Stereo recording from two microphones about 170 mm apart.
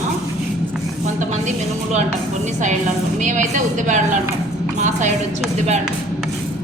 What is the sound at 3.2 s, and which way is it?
A woman's voice, 45° right (ahead or behind).